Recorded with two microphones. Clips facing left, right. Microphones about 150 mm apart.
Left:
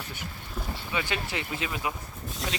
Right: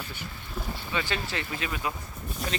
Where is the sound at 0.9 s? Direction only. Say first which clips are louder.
Even; 15° left (ahead or behind).